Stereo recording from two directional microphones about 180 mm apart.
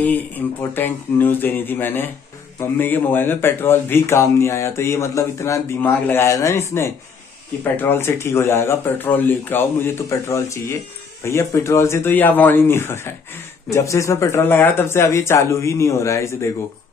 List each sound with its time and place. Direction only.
0.0 s speech: 10° left (ahead or behind)